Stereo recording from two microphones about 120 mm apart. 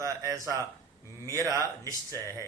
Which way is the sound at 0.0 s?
30° right (ahead or behind).